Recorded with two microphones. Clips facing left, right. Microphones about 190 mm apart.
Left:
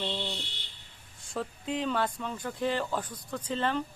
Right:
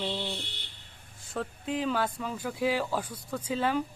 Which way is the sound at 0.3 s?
55° right (ahead or behind).